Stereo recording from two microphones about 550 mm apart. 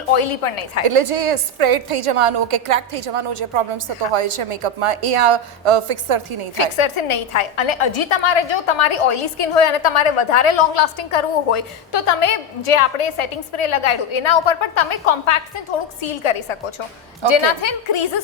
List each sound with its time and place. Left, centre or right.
0.1 s a woman's voice: left
0.9 s a woman's voice: right
6.6 s a woman's voice: left
17.2 s a woman's voice: left